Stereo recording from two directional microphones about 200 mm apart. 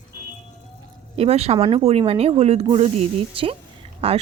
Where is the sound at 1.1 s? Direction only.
30° right (ahead or behind).